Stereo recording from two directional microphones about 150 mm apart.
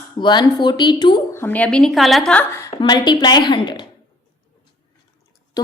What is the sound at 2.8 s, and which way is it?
A woman's voice, 30° left (ahead or behind).